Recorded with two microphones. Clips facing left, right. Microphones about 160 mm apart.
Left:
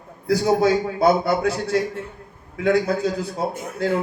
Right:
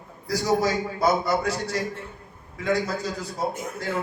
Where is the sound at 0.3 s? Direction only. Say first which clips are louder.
Left 5 dB; 60° left (ahead or behind).